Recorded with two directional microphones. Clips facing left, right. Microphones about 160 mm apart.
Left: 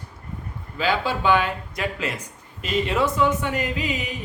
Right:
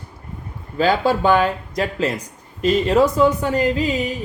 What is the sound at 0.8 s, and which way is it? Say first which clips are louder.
Speech: right 6 dB; 40° right (ahead or behind).